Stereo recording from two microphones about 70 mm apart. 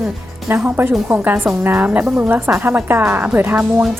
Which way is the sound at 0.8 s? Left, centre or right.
Right.